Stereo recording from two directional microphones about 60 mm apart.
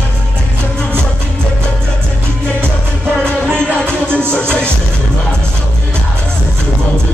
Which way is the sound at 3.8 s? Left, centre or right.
Centre.